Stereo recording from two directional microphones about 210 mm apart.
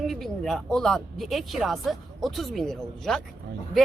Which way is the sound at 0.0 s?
Centre (ahead or behind).